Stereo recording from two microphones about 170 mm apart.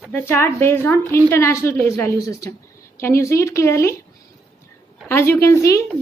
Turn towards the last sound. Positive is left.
turn(degrees=20)  # may be behind; listen again after turning